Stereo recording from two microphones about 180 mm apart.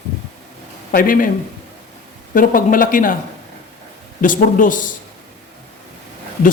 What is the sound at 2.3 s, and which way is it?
Speech, 50° left (ahead or behind).